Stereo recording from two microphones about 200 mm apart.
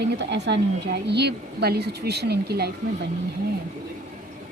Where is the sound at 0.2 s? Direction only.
60° right (ahead or behind).